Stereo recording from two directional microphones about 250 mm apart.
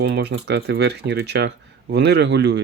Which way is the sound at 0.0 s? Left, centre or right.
Right.